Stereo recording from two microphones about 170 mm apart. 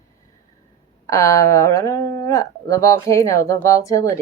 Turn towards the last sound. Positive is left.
turn(degrees=15)  # may be behind; listen again after turning